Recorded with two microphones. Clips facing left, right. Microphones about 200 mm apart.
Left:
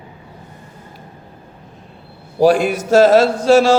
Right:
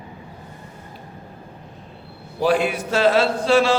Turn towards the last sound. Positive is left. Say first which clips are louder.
# left 6 dB
turn(degrees=45)  # may be behind; listen again after turning